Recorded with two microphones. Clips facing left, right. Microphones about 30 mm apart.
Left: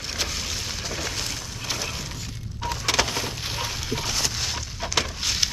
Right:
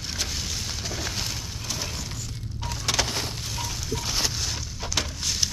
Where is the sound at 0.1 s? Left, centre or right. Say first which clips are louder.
Left 2 dB; centre.